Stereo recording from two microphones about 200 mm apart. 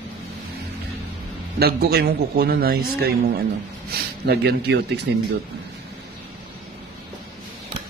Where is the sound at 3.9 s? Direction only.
55° right (ahead or behind).